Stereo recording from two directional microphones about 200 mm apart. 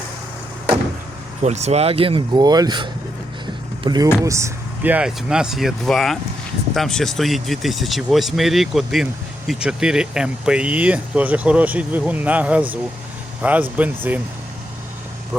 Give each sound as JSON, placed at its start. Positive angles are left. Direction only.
{"t": 1.4, "sound": "speech", "side_deg": -35}